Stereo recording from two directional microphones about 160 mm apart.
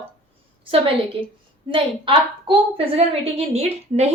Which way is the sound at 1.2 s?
30° right (ahead or behind).